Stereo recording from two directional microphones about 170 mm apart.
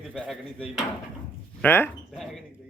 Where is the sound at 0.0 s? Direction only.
Centre (ahead or behind).